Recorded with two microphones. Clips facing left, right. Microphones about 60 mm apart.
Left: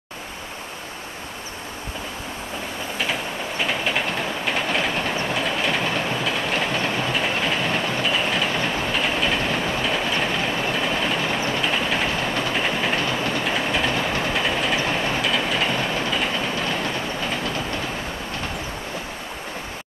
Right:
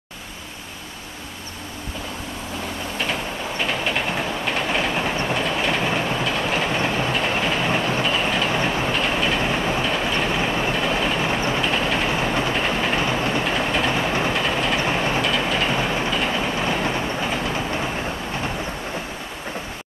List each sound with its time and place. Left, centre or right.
3.0 s train: centre
8.5 s train: centre
8.9 s train: centre
9.8 s train: centre
10.3 s train: centre
12.1 s train: centre
12.5 s train: centre
13.0 s train: centre
13.5 s train: centre
13.9 s train: centre
14.3 s train: centre
14.9 s train: centre
15.2 s train: centre